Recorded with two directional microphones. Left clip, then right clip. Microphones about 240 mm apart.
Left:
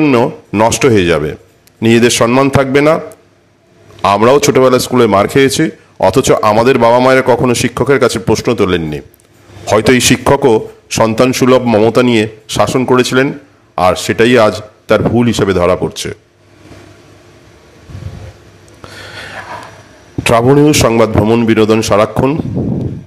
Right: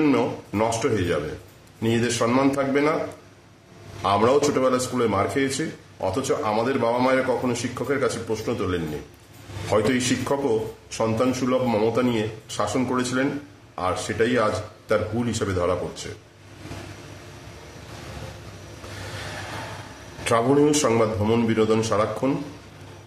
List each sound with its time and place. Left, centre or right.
0.0 s speech: left
4.0 s speech: left
11.0 s speech: left
20.2 s speech: left